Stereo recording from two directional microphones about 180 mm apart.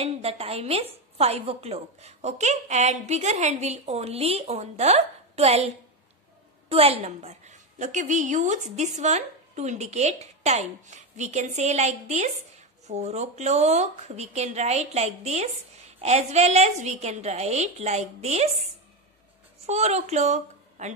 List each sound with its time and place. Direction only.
0.0 s a woman's voice: 35° right (ahead or behind)
6.7 s a woman's voice: 35° right (ahead or behind)